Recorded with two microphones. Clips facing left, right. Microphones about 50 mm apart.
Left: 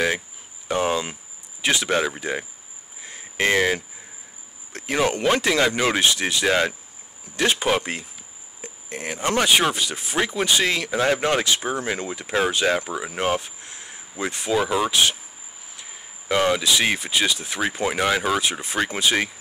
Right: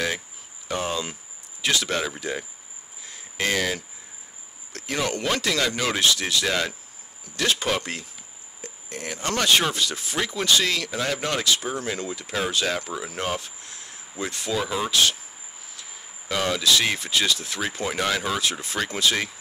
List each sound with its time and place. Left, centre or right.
0.7 s speech: left
3.0 s cricket: left
4.7 s speech: left